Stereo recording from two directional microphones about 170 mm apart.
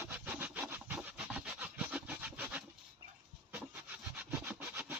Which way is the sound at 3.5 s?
10° right (ahead or behind).